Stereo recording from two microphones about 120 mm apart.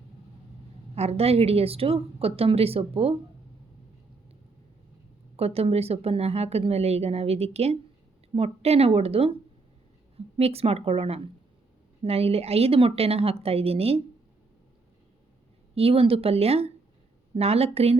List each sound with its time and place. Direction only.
0.9 s speech: 60° right (ahead or behind)
5.4 s speech: 55° right (ahead or behind)
15.7 s speech: 55° right (ahead or behind)